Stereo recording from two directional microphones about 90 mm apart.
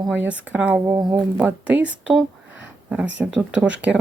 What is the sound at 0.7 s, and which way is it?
Speech, 35° right (ahead or behind).